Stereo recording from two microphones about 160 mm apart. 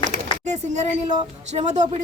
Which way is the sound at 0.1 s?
45° right (ahead or behind).